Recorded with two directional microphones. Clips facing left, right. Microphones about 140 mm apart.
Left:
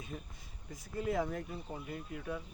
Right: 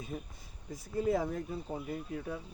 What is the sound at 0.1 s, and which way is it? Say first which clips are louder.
Speech: right 4 dB; 40° right (ahead or behind).